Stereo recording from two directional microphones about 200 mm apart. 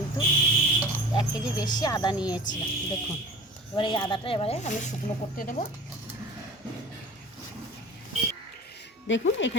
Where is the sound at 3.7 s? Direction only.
25° left (ahead or behind); by 5.6 s 40° left (ahead or behind).